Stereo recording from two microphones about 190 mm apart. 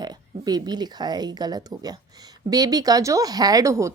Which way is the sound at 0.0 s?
20° right (ahead or behind).